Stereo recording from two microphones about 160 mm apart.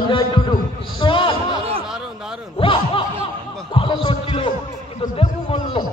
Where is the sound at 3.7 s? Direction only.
35° left (ahead or behind).